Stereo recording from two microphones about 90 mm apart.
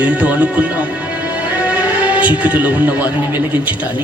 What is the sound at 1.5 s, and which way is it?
Music, 15° right (ahead or behind).